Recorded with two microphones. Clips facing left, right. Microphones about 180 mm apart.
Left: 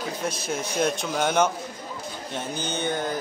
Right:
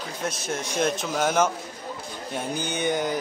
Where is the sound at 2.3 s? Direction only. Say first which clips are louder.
Right 2 dB; 15° right (ahead or behind).